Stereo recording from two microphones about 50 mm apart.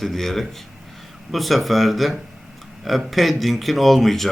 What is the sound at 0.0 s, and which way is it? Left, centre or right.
Speech, centre.